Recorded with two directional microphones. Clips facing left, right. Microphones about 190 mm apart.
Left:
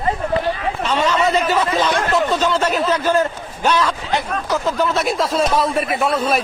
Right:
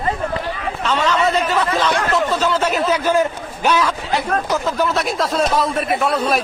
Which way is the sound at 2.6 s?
10° right (ahead or behind).